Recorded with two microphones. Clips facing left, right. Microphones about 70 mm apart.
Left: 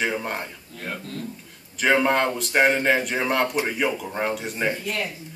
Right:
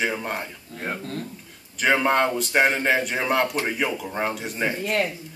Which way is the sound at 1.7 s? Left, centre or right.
Centre.